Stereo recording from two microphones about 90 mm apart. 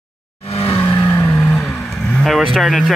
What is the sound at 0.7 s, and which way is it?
Vehicle, 20° left (ahead or behind).